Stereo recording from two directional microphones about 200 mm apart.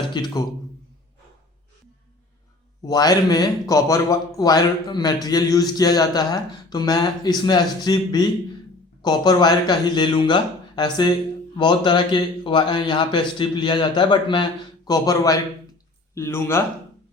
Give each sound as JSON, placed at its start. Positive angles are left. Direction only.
{"t": 0.1, "sound": "speech", "side_deg": 20}
{"t": 2.8, "sound": "a man's voice", "side_deg": 20}